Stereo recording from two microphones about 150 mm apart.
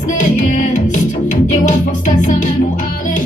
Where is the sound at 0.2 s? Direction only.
55° left (ahead or behind).